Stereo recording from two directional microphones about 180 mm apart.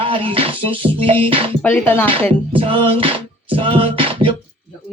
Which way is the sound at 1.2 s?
30° right (ahead or behind).